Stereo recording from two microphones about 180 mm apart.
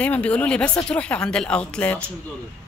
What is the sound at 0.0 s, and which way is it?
A woman's voice, 5° left (ahead or behind).